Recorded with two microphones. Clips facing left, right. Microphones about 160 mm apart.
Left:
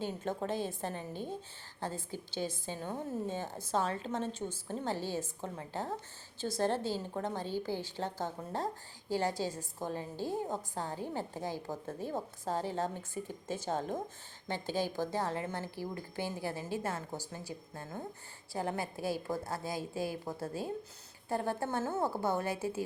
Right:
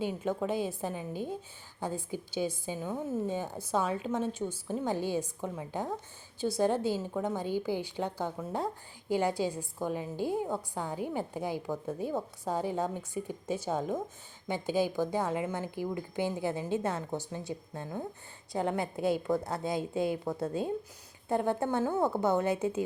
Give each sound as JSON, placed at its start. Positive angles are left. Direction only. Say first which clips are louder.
{"t": 0.0, "sound": "a woman's voice", "louder": "right 4 dB", "side_deg": -10}